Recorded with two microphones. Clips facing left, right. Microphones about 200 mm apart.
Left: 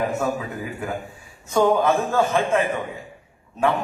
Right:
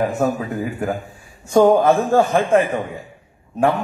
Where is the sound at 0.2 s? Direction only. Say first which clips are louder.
Right 8 dB; 45° right (ahead or behind).